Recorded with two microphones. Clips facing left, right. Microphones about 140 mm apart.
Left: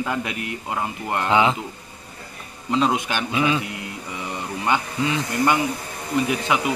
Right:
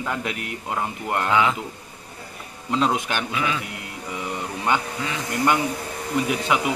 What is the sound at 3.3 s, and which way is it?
Speech, 25° left (ahead or behind).